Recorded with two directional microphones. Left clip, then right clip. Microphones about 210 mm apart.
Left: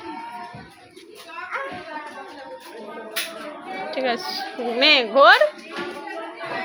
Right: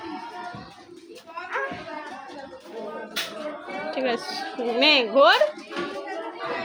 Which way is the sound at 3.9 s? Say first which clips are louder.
Left 2 dB; 5° right (ahead or behind).